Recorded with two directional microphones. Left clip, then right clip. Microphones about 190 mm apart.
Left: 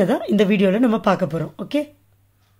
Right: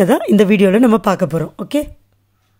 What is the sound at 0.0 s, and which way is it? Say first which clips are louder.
Speech: right 6 dB; 30° right (ahead or behind).